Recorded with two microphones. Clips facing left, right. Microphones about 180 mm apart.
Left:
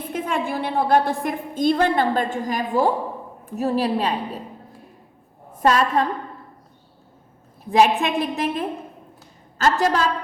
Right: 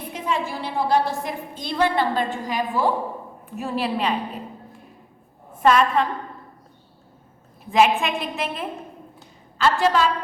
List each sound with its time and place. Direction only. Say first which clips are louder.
0.1 s a woman's voice: left 2 dB; 55° left (ahead or behind)
5.5 s a woman's voice: right 1 dB; 40° left (ahead or behind)
7.7 s a woman's voice: left 1 dB; 40° left (ahead or behind)